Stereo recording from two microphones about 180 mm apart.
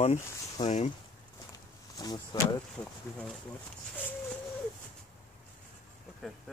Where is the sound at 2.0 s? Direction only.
20° left (ahead or behind).